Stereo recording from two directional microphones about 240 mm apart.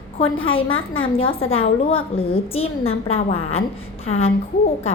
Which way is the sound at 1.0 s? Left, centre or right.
Left.